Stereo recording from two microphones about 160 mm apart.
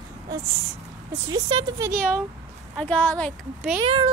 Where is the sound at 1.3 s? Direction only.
25° right (ahead or behind).